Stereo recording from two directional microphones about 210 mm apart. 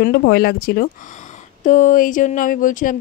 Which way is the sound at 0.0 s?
55° left (ahead or behind).